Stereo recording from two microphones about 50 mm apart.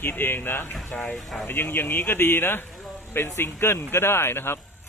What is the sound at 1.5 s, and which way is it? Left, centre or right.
Speech, left.